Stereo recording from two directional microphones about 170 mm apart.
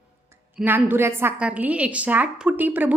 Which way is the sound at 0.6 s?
10° right (ahead or behind).